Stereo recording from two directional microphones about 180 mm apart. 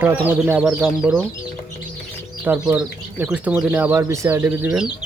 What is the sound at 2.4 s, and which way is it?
Speech, 10° right (ahead or behind).